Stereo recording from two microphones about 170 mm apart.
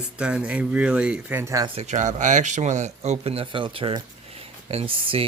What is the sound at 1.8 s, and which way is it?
Speech, 45° right (ahead or behind).